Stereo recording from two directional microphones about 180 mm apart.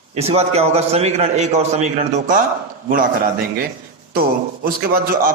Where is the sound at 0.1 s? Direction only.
35° right (ahead or behind).